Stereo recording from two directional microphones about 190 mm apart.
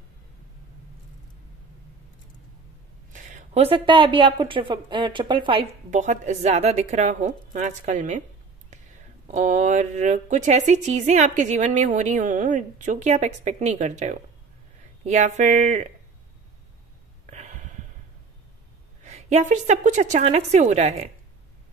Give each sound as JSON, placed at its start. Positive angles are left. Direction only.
{"t": 3.1, "sound": "a woman's voice", "side_deg": -40}
{"t": 5.9, "sound": "speech", "side_deg": -40}
{"t": 9.3, "sound": "speech", "side_deg": -40}
{"t": 17.3, "sound": "a sound", "side_deg": -40}
{"t": 19.0, "sound": "speech", "side_deg": -35}